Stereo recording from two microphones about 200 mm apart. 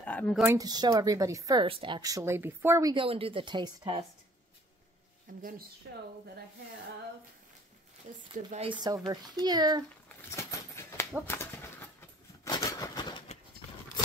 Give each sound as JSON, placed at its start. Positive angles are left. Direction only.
{"t": 0.0, "sound": "a sound", "side_deg": 10}
{"t": 0.5, "sound": "a woman's voice", "side_deg": -20}
{"t": 5.3, "sound": "speech", "side_deg": -40}
{"t": 5.9, "sound": "speech", "side_deg": -60}
{"t": 8.1, "sound": "speech", "side_deg": -40}
{"t": 8.8, "sound": "a woman's voice", "side_deg": -20}
{"t": 10.0, "sound": "horse", "side_deg": 15}
{"t": 12.4, "sound": "a sound", "side_deg": 20}